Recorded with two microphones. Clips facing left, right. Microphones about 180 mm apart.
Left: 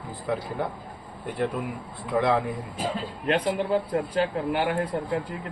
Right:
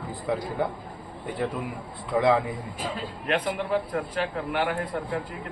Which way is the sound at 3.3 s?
30° left (ahead or behind).